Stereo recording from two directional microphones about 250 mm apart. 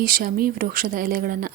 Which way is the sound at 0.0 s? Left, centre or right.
Right.